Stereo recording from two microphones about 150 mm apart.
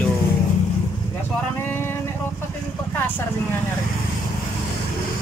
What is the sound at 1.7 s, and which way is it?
Vehicle, 15° left (ahead or behind).